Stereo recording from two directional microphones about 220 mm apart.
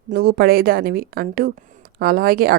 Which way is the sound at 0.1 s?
40° right (ahead or behind).